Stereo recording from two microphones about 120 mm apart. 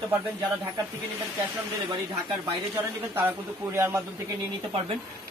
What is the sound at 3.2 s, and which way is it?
Speech, 20° right (ahead or behind).